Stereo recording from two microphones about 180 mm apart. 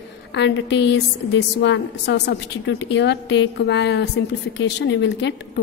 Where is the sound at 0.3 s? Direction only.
75° left (ahead or behind).